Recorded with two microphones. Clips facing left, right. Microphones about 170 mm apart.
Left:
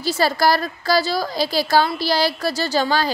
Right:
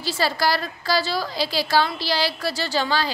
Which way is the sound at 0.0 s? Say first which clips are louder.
Left 5 dB; 45° left (ahead or behind).